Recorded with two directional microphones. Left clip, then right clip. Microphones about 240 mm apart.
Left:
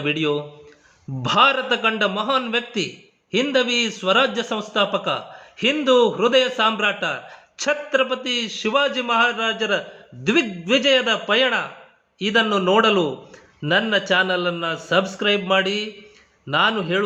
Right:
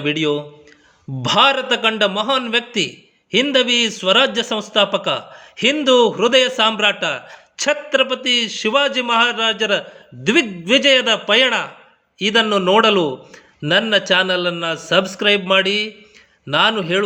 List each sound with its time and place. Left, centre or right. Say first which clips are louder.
0.0 s a man's voice: right 3 dB; right